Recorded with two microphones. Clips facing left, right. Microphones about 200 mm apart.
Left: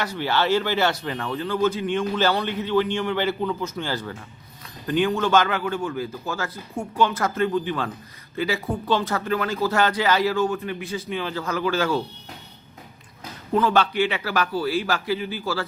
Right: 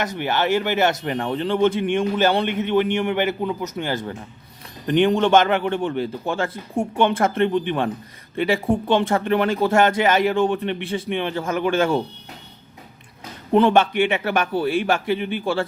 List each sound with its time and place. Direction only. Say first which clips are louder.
0.0 s speech: right 1 dB; 20° right (ahead or behind)
13.5 s speech: right 5 dB; 25° right (ahead or behind)